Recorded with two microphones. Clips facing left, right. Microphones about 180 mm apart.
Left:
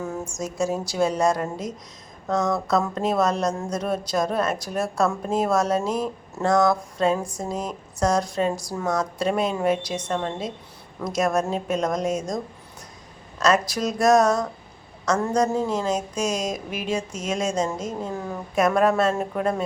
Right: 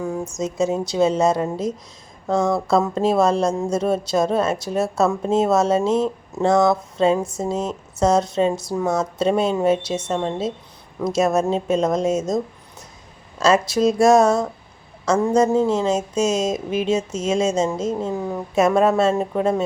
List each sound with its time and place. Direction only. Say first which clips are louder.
0.3 s a woman's voice: right 4 dB; 20° right (ahead or behind)
13.4 s a woman's voice: right 5 dB; 25° right (ahead or behind)